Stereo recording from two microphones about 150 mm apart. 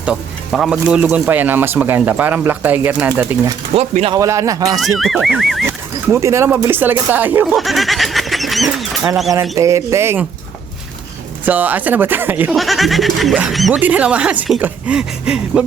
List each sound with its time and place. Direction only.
0.0 s speech: 5° right (ahead or behind)
3.8 s speech: 45° right (ahead or behind)
4.1 s speech: 20° right (ahead or behind)
4.8 s speech: centre (ahead or behind)
5.6 s speech: 20° right (ahead or behind)
7.5 s speech: centre (ahead or behind)
9.3 s speech: 20° right (ahead or behind)
11.4 s speech: 10° right (ahead or behind)
12.5 s speech: centre (ahead or behind)